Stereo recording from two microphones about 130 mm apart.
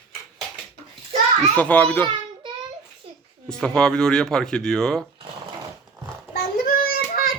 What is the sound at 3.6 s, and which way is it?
Speech, 5° left (ahead or behind).